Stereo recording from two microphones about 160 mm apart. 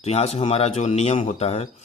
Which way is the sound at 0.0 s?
40° left (ahead or behind).